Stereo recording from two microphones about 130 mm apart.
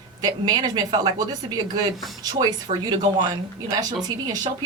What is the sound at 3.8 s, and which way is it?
Speech, 30° right (ahead or behind).